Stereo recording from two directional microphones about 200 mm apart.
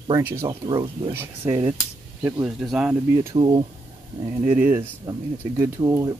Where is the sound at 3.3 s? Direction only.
25° right (ahead or behind).